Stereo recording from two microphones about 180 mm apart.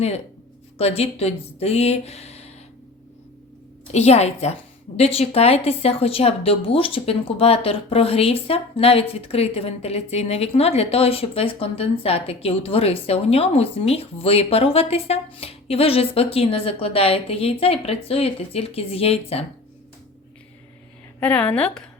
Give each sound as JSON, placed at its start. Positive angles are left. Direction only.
{"t": 0.8, "sound": "speech", "side_deg": 35}
{"t": 3.9, "sound": "speech", "side_deg": 35}
{"t": 21.2, "sound": "a woman's voice", "side_deg": 5}